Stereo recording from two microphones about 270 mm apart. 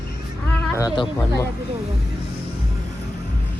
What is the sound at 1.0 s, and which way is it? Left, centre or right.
Speech, centre.